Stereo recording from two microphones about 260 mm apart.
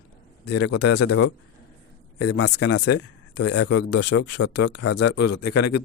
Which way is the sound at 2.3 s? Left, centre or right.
Left.